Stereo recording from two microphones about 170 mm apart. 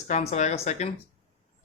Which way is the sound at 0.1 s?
40° left (ahead or behind).